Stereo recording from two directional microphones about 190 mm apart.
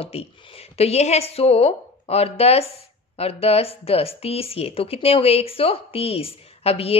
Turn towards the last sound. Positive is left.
turn(degrees=30)  # may be behind; listen again after turning